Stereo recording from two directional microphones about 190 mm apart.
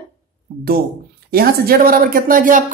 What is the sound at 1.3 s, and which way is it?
A woman's voice, 50° right (ahead or behind).